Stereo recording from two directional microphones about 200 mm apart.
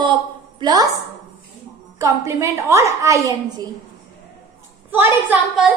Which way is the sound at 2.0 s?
15° right (ahead or behind).